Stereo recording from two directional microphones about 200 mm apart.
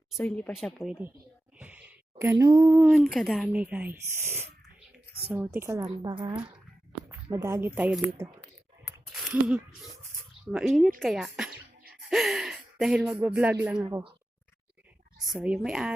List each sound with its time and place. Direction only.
0.2 s speech: 5° left (ahead or behind)
1.5 s a sound: 5° right (ahead or behind)
2.6 s speech: 10° right (ahead or behind)
5.5 s a woman's voice: 10° right (ahead or behind)
9.1 s speech: 5° right (ahead or behind)
13.8 s a woman's voice: 20° right (ahead or behind)
15.2 s speech: 5° right (ahead or behind)